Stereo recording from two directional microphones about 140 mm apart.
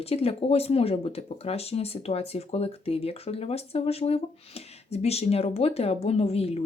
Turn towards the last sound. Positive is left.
turn(degrees=45)  # may be behind; listen again after turning